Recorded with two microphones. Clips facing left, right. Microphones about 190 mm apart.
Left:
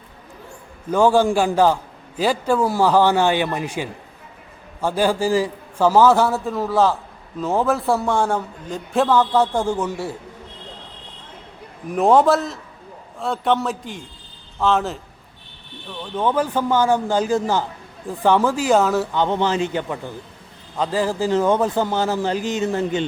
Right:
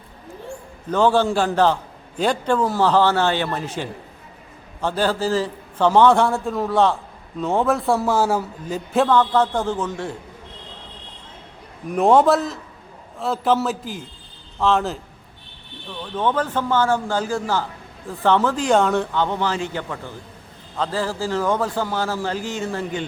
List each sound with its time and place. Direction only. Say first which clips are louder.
0.9 s a man's voice: left 2 dB; 10° left (ahead or behind)
11.9 s a man's voice: even; centre (ahead or behind)
19.1 s a man's voice: left 3 dB; 20° left (ahead or behind)